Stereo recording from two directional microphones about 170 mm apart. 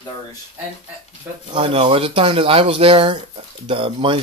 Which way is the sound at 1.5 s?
35° right (ahead or behind).